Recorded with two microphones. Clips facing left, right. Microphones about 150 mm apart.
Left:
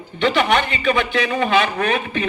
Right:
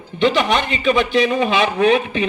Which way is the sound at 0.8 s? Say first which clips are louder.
Right 3 dB; 20° right (ahead or behind).